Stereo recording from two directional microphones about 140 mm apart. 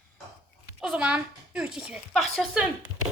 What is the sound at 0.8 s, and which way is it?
A woman's voice, 10° right (ahead or behind).